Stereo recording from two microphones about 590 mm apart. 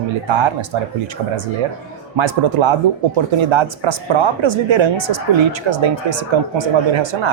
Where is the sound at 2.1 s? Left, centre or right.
Right.